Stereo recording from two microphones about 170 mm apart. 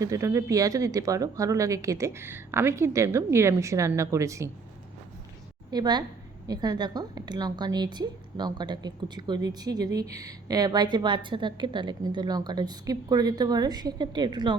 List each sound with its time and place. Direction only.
0.0 s speech: 20° right (ahead or behind)
5.7 s speech: 25° right (ahead or behind)